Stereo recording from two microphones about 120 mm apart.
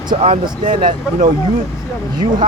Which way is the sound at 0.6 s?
90° right.